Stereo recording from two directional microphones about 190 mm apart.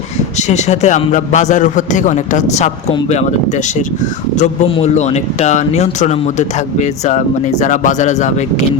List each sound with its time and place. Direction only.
0.3 s speech: 35° left (ahead or behind)